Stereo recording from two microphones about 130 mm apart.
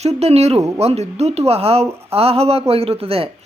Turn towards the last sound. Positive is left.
turn(degrees=-45)  # may be behind; listen again after turning